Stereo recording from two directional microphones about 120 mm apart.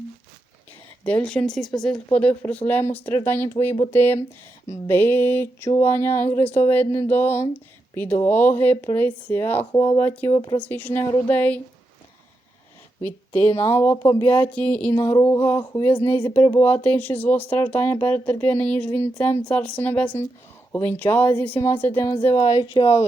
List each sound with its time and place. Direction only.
1.0 s speech: 10° left (ahead or behind)
2.5 s speech: 15° left (ahead or behind)
10.3 s speech: 35° left (ahead or behind)
10.6 s speech: 15° left (ahead or behind)
13.1 s speech: 15° left (ahead or behind)
13.9 s speech: 30° left (ahead or behind)
14.3 s speech: 15° left (ahead or behind)
14.9 s speech: 20° left (ahead or behind)
22.4 s a woman's voice: 45° left (ahead or behind)